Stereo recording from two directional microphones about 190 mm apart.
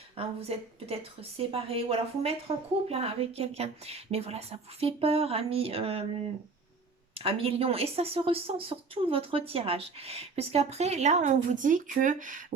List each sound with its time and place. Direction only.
0.2 s a woman's voice: 30° right (ahead or behind)
7.1 s a woman's voice: 30° right (ahead or behind)